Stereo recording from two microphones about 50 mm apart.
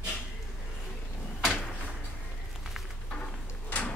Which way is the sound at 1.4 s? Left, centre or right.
Centre.